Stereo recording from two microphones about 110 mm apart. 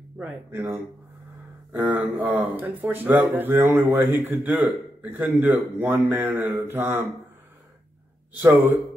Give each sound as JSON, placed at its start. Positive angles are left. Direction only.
{"t": 0.5, "sound": "a man's voice", "side_deg": -20}
{"t": 2.1, "sound": "speech", "side_deg": -15}
{"t": 8.4, "sound": "a man's voice", "side_deg": -20}